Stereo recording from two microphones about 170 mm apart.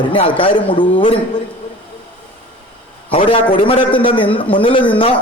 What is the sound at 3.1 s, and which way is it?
A man's voice, 30° left (ahead or behind).